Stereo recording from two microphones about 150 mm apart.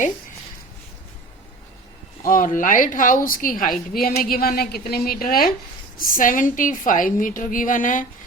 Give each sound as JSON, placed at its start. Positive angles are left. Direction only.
{"t": 2.2, "sound": "a woman's voice", "side_deg": 65}
{"t": 6.0, "sound": "a woman's voice", "side_deg": 65}